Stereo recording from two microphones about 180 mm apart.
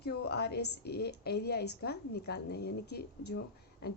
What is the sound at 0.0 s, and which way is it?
A woman's voice, 65° left (ahead or behind).